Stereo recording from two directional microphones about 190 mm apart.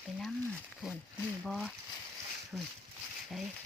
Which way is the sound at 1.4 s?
Centre (ahead or behind).